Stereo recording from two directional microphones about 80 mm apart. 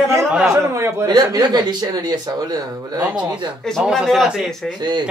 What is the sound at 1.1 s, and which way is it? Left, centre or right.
Speech, right.